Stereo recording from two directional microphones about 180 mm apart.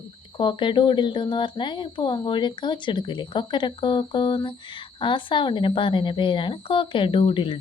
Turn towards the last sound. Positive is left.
turn(degrees=30)  # may be behind; listen again after turning